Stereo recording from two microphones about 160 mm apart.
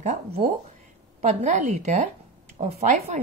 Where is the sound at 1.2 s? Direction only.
45° right (ahead or behind).